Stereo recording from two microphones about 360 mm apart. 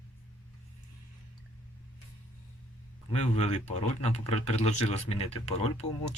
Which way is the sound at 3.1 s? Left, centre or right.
Centre.